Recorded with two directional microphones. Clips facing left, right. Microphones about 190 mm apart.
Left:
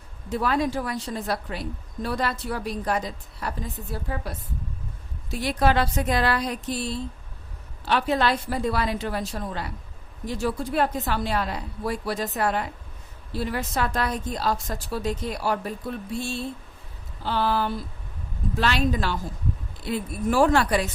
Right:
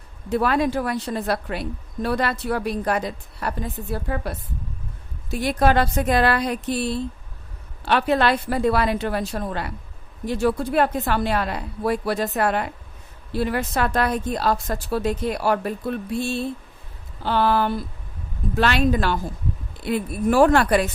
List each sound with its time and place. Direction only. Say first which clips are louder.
0.3 s a woman's voice: right 4 dB; 65° right (ahead or behind)
5.3 s a woman's voice: right 3 dB; 50° right (ahead or behind)